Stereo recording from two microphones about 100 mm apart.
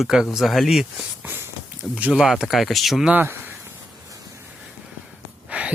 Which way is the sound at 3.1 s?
20° right (ahead or behind).